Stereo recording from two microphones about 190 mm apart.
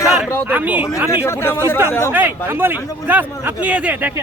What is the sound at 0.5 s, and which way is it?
Speech, 10° right (ahead or behind).